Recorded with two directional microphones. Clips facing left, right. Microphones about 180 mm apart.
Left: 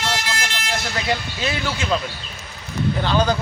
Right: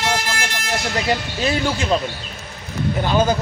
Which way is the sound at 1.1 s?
35° right (ahead or behind).